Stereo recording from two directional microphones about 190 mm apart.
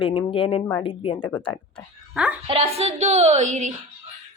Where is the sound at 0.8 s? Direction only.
25° left (ahead or behind).